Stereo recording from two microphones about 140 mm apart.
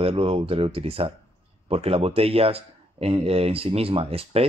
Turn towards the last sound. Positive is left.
turn(degrees=-45)  # may be behind; listen again after turning